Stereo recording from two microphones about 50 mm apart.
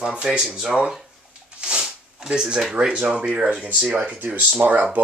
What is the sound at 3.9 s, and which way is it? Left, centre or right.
Speech, right.